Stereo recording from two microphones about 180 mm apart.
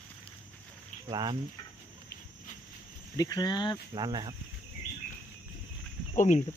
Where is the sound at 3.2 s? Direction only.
20° left (ahead or behind).